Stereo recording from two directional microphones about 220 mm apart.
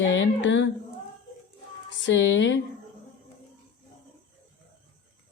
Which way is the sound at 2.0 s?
55° left (ahead or behind).